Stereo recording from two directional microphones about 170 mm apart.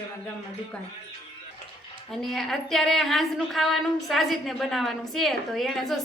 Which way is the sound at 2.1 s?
Centre (ahead or behind).